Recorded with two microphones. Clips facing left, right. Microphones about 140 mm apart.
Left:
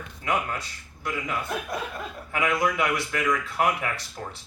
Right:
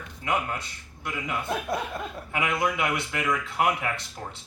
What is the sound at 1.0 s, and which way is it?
Speech, 25° right (ahead or behind).